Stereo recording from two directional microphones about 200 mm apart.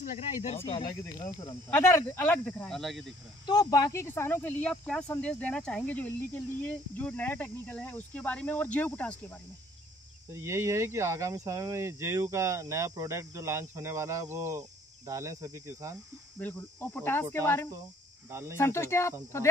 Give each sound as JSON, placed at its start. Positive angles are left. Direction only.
{"t": 0.0, "sound": "speech", "side_deg": 35}
{"t": 3.4, "sound": "speech", "side_deg": 20}
{"t": 10.3, "sound": "speech", "side_deg": -15}
{"t": 16.3, "sound": "speech", "side_deg": 10}